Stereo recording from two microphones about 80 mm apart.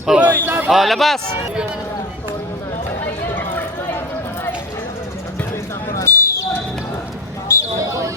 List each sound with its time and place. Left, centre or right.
0.0 s speech: centre
0.3 s speech: right
0.7 s speech: centre
6.0 s basketball bounce: left
7.8 s a sound: right